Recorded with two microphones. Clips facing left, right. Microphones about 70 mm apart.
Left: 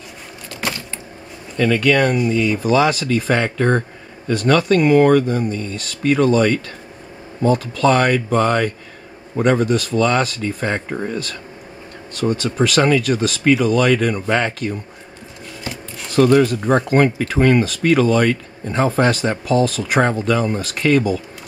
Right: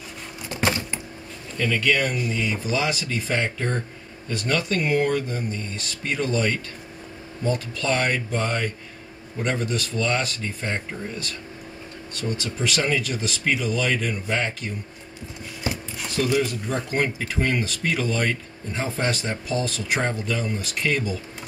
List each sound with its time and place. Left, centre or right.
0.5 s a sound: right
1.6 s speech: left
4.5 s speech: left
7.5 s speech: left
9.4 s speech: left
12.2 s speech: left
16.2 s speech: left
20.2 s speech: left